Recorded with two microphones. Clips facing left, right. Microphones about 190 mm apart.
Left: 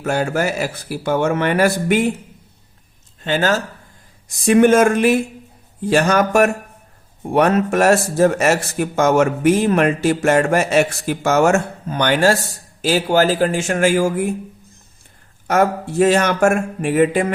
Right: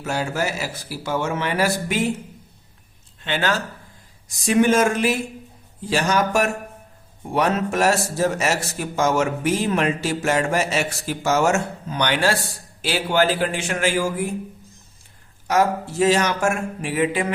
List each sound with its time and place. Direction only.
0.0 s speech: 55° left (ahead or behind)
3.2 s a man's voice: 45° left (ahead or behind)
4.4 s a man's voice: 55° left (ahead or behind)
15.4 s a man's voice: 55° left (ahead or behind)